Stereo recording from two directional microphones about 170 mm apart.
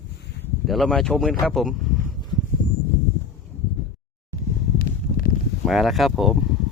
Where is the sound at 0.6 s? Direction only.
Centre (ahead or behind).